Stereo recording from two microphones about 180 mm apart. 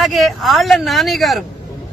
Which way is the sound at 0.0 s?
Centre (ahead or behind).